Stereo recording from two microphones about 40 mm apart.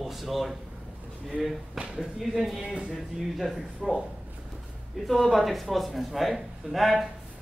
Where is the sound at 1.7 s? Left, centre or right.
Right.